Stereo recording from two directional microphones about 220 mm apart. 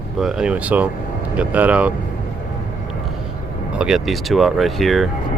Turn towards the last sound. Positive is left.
turn(degrees=0)  # may be behind; listen again after turning